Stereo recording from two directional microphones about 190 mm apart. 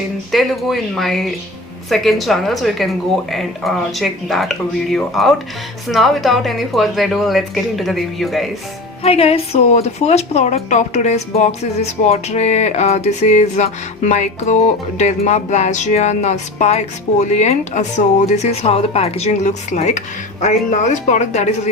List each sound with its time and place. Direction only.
0.3 s speech: centre (ahead or behind)
9.0 s a woman's voice: 30° left (ahead or behind)